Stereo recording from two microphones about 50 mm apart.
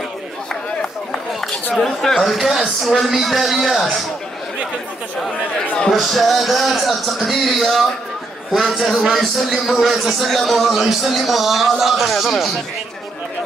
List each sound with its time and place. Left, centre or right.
1.8 s speech: centre
2.3 s a man's voice: centre
5.9 s a man's voice: centre